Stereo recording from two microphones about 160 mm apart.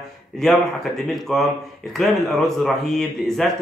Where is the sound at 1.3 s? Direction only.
5° left (ahead or behind).